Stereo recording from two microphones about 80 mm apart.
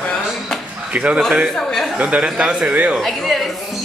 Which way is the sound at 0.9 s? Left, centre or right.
Centre.